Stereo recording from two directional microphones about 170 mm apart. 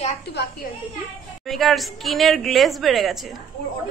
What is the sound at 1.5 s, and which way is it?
A woman's voice, centre (ahead or behind).